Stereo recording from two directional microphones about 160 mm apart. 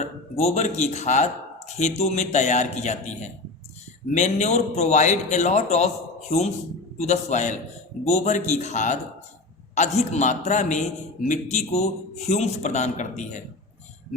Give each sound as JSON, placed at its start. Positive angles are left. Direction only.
{"t": 0.0, "sound": "speech", "side_deg": 45}